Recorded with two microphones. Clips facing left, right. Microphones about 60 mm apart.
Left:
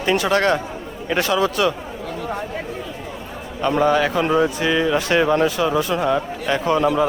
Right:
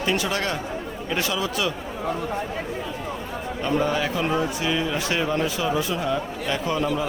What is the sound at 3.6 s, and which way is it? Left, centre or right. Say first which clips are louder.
Speech: left 6 dB; left.